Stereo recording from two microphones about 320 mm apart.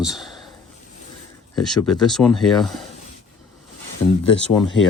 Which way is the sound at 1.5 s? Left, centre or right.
Centre.